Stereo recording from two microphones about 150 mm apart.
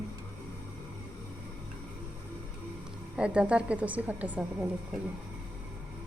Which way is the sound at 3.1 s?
5° right (ahead or behind).